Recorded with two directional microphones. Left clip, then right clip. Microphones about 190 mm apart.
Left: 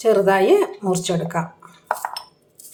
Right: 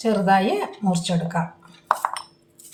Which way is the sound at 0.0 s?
30° left (ahead or behind).